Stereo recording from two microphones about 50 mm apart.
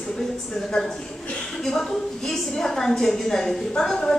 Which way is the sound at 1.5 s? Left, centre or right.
Centre.